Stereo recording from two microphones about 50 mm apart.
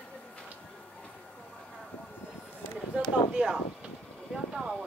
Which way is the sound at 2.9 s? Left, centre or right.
Centre.